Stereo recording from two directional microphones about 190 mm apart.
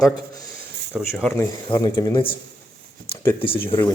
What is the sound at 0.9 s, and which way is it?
Speech, centre (ahead or behind).